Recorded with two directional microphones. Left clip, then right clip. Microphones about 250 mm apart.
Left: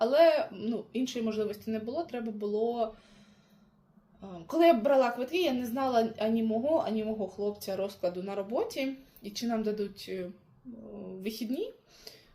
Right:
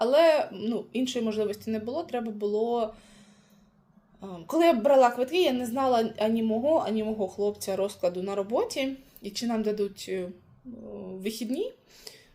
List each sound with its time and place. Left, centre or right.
0.0 s a woman's voice: right
4.2 s a woman's voice: right